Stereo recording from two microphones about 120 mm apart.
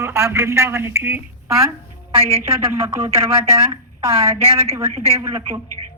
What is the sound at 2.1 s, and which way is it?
Speech, 60° right (ahead or behind).